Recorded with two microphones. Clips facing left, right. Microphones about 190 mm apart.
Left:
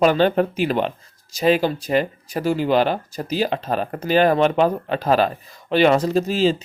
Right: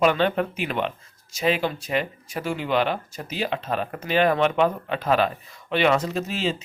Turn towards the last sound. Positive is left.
turn(degrees=35)  # may be behind; listen again after turning